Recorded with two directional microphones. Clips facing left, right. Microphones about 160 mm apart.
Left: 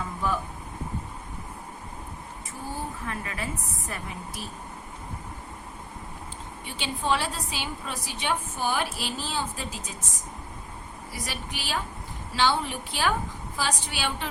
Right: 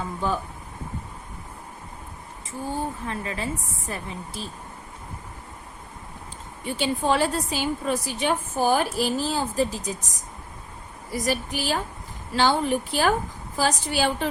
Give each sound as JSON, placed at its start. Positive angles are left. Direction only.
{"t": 0.2, "sound": "a woman's voice", "side_deg": -25}
{"t": 2.6, "sound": "a woman's voice", "side_deg": -30}
{"t": 6.7, "sound": "a woman's voice", "side_deg": -45}
{"t": 11.1, "sound": "a woman's voice", "side_deg": -45}